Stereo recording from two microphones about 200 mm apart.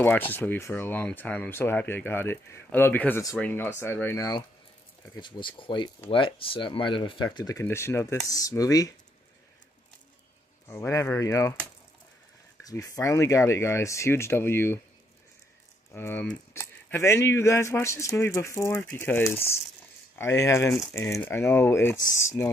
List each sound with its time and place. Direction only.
0.0 s speech: 10° left (ahead or behind)
10.7 s speech: 15° left (ahead or behind)
12.6 s speech: 15° left (ahead or behind)
15.9 s speech: 10° left (ahead or behind)
19.3 s speech: 30° left (ahead or behind)
20.2 s speech: 15° left (ahead or behind)